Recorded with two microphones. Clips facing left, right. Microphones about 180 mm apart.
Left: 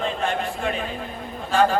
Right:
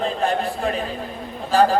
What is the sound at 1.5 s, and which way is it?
Speech, 35° right (ahead or behind).